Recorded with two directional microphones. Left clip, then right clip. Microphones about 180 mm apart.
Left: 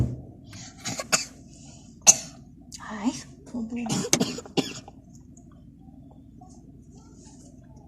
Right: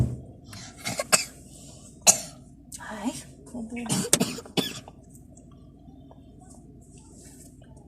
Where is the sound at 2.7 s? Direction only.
25° left (ahead or behind).